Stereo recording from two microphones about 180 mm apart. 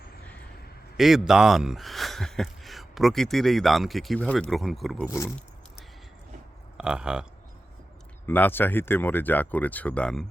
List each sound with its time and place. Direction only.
0.9 s a man's voice: centre (ahead or behind)
5.0 s speech: 15° left (ahead or behind)
6.7 s speech: 5° right (ahead or behind)
8.3 s speech: 10° left (ahead or behind)